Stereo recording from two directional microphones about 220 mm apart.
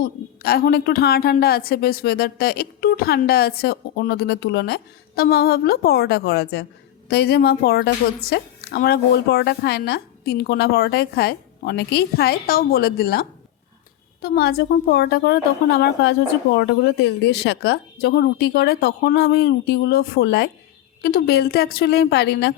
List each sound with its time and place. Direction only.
0.0 s a woman's voice: 45° left (ahead or behind)